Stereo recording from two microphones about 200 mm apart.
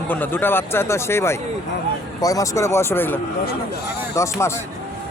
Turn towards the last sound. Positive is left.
turn(degrees=15)  # may be behind; listen again after turning